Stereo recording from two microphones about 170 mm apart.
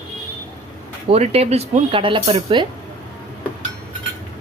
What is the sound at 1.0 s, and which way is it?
Speech, 35° right (ahead or behind).